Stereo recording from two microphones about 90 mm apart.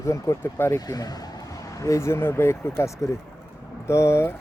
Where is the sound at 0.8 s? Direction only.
45° left (ahead or behind).